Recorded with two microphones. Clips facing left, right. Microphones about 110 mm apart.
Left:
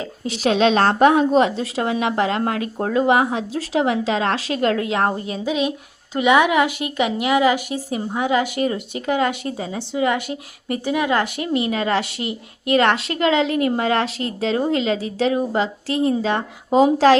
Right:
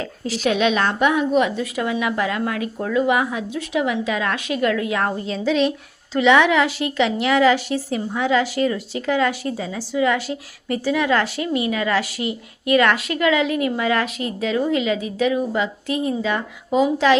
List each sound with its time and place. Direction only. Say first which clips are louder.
0.3 s a woman's voice: left 2 dB; 30° left (ahead or behind)
5.3 s a woman's voice: right 2 dB; 10° left (ahead or behind); by 17.2 s 35° left (ahead or behind)